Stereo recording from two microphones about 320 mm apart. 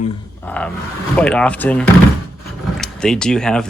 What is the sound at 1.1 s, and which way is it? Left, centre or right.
Speech, centre.